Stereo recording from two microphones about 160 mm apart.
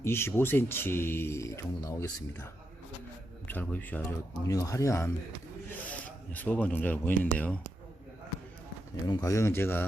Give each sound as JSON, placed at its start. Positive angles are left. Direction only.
{"t": 0.0, "sound": "a man's voice", "side_deg": 15}
{"t": 9.0, "sound": "speech", "side_deg": 25}